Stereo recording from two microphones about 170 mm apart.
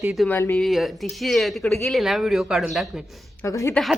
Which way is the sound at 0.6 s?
Centre (ahead or behind).